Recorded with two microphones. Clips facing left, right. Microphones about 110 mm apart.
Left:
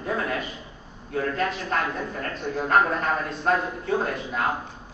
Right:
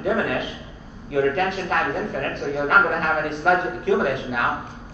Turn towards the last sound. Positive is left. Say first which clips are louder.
# right 5 dB
turn(degrees=-70)  # may be behind; listen again after turning